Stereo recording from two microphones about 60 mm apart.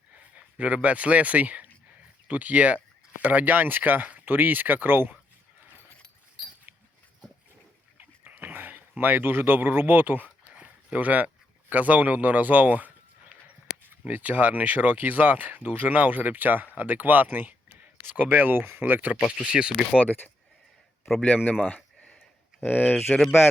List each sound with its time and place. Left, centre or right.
0.3 s speech: right
7.9 s a sound: right
10.9 s speech: right
14.1 s speech: right
19.4 s speech: centre
20.1 s speech: left
22.6 s speech: left